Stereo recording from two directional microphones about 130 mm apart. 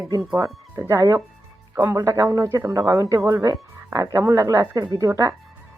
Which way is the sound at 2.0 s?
25° right (ahead or behind).